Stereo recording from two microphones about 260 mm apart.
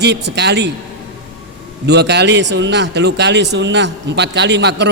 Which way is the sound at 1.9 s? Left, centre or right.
Right.